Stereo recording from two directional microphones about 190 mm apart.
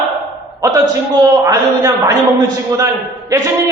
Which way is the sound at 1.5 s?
15° right (ahead or behind).